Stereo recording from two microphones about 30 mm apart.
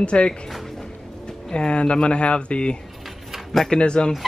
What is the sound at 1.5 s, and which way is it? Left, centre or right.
Speech, left.